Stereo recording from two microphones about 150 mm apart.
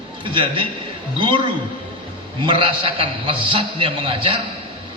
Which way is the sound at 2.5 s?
35° right (ahead or behind).